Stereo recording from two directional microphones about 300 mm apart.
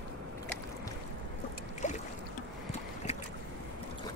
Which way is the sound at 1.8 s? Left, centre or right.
Left.